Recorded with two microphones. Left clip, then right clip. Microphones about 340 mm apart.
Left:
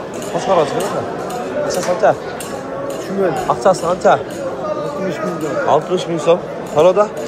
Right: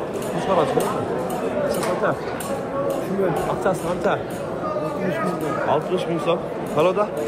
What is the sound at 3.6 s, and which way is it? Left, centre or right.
Speech, centre.